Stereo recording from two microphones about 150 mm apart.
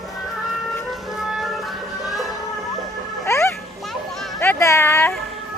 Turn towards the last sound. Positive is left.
turn(degrees=15)  # may be behind; listen again after turning